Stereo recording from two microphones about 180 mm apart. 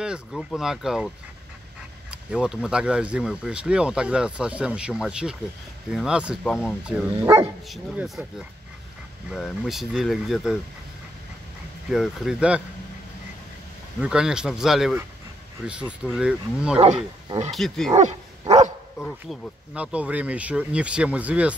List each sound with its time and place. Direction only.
0.0 s speech: 5° right (ahead or behind)
11.9 s speech: 5° right (ahead or behind)
14.0 s speech: 5° right (ahead or behind)
17.9 s dog: 40° right (ahead or behind)
19.0 s speech: 5° left (ahead or behind)
19.7 s speech: 5° right (ahead or behind)